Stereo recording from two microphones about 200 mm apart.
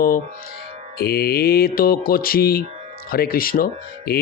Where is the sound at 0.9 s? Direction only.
50° left (ahead or behind).